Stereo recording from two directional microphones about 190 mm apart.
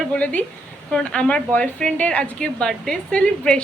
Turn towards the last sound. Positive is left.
turn(degrees=5)  # may be behind; listen again after turning